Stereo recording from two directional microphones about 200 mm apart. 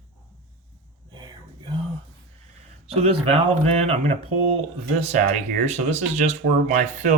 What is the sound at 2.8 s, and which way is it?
Speech, 30° right (ahead or behind).